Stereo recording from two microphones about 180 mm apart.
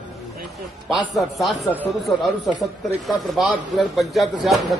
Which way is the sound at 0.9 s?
Centre (ahead or behind).